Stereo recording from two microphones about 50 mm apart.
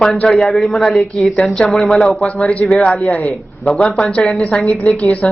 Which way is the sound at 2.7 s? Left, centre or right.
Left.